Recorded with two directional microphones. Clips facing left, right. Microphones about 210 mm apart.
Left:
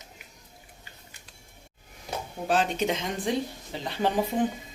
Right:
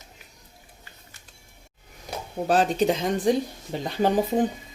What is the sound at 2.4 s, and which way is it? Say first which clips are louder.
Speech: right 5 dB; 35° right (ahead or behind).